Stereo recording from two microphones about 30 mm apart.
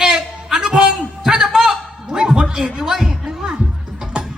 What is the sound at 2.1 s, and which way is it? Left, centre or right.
Music, right.